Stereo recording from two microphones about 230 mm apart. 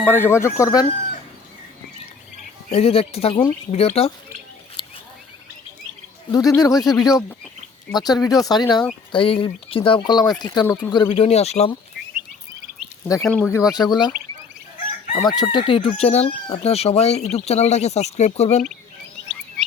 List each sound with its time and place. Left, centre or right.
0.1 s speech: centre
2.6 s speech: left
6.3 s speech: centre
13.2 s speech: centre; by 18.6 s left